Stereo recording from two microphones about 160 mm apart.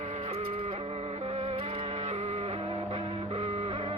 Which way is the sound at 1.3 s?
35° right (ahead or behind).